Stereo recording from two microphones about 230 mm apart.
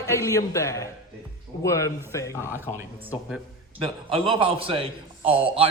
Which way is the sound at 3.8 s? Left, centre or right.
Right.